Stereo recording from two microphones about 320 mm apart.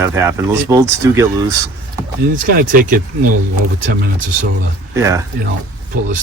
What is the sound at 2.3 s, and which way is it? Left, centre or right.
Speech, right.